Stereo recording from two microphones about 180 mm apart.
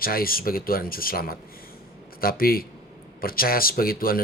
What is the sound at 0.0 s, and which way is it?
Speech, 55° left (ahead or behind).